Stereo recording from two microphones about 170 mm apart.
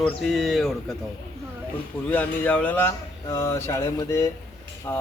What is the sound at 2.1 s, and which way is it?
Speech, 10° left (ahead or behind).